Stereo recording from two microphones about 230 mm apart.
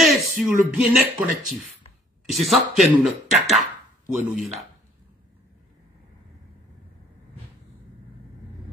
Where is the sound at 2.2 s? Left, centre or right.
Centre.